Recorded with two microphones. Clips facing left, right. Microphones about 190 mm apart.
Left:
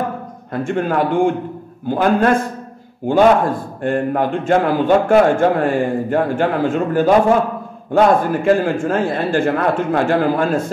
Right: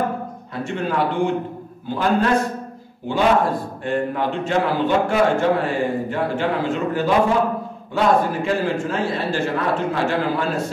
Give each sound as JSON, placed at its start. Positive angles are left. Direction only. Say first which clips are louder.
{"t": 0.7, "sound": "a man's voice", "louder": "left 4 dB", "side_deg": 50}